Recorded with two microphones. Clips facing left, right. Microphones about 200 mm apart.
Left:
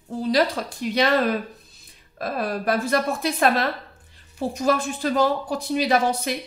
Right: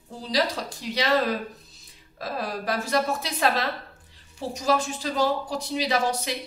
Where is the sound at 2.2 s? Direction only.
55° left (ahead or behind).